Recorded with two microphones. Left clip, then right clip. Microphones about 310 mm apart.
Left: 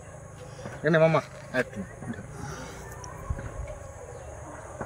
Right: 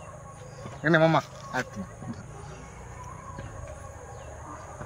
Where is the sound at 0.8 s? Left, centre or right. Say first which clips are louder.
Even; centre.